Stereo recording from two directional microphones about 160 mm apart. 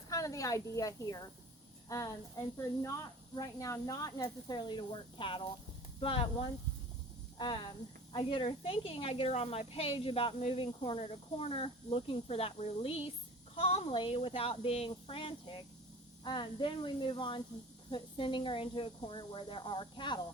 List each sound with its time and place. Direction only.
0.1 s speech: 20° left (ahead or behind)
8.1 s speech: 30° left (ahead or behind)